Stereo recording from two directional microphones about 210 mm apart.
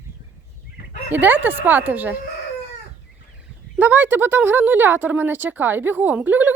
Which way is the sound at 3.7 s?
5° right (ahead or behind).